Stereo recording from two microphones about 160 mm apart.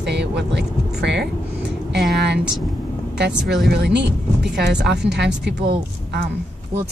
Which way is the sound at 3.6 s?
90° right.